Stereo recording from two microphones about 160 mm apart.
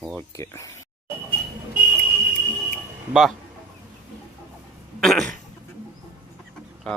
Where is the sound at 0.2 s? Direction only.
15° left (ahead or behind).